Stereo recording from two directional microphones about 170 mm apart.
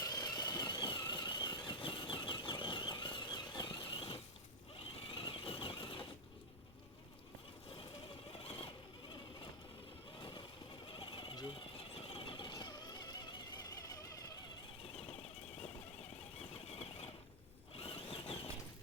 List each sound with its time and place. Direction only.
0.0 s squeal: 20° left (ahead or behind)
4.8 s vehicle: 30° left (ahead or behind)
8.4 s vehicle: 35° left (ahead or behind)
10.2 s vehicle: 30° left (ahead or behind)
10.9 s a sound: 30° left (ahead or behind)
11.9 s music: 35° left (ahead or behind)
17.7 s zipper: 35° left (ahead or behind)